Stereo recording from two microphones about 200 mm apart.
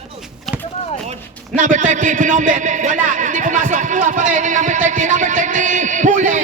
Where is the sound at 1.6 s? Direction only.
40° right (ahead or behind).